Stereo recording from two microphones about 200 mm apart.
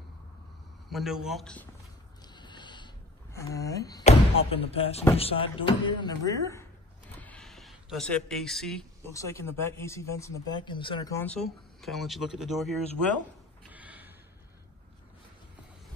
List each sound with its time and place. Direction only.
0.8 s speech: centre (ahead or behind)
2.2 s a sound: 20° left (ahead or behind)
3.3 s speech: 15° left (ahead or behind)
4.0 s speech: 30° left (ahead or behind)
7.2 s a sound: 5° left (ahead or behind)
9.0 s speech: 15° left (ahead or behind)
11.1 s speech: 5° left (ahead or behind)
13.7 s gasp: 10° right (ahead or behind)